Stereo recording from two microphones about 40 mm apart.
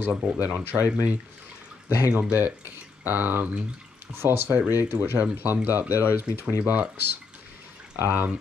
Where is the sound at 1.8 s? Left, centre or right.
Right.